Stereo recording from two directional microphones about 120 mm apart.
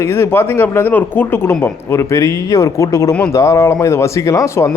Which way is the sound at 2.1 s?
25° left (ahead or behind).